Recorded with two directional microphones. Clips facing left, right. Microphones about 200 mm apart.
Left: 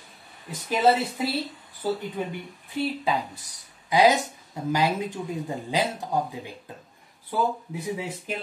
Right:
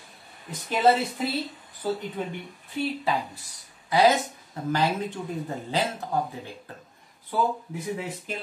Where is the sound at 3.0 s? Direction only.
15° left (ahead or behind).